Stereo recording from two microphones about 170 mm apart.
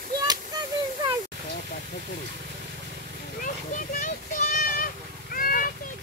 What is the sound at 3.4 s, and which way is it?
A child's voice, 50° left (ahead or behind).